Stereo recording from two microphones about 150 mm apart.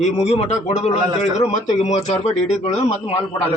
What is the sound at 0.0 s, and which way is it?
Speech, 50° left (ahead or behind).